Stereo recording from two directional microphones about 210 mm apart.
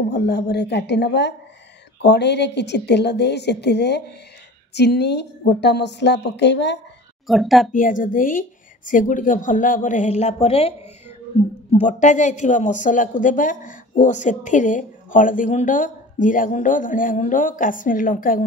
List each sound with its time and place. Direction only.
0.1 s a woman's voice: 55° left (ahead or behind)
7.2 s a woman's voice: centre (ahead or behind)
7.7 s speech: 40° left (ahead or behind)